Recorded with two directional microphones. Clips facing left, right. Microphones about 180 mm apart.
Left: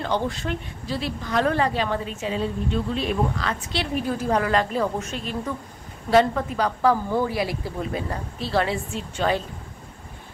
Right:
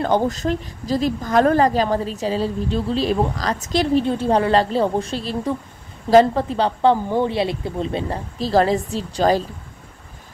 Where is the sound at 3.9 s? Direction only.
25° right (ahead or behind).